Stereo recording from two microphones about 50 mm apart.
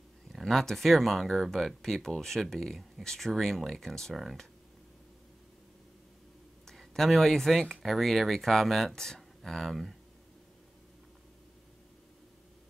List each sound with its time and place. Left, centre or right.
0.3 s speech: centre
6.6 s speech: centre